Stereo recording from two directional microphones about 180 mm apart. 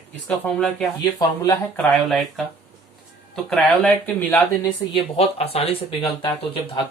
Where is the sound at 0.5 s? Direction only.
5° left (ahead or behind).